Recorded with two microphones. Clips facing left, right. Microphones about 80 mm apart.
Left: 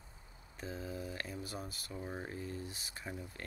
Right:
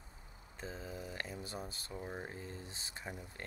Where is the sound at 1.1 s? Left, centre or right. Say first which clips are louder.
Left 1 dB; right.